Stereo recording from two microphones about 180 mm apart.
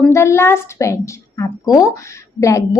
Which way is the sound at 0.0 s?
15° left (ahead or behind).